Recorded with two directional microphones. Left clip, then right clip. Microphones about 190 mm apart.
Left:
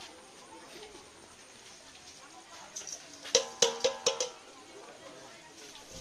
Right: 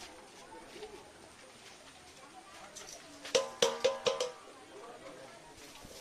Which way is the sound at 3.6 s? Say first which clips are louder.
Left 1 dB; 40° left (ahead or behind).